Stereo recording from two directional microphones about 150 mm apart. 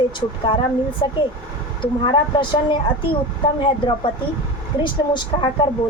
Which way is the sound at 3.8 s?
30° left (ahead or behind).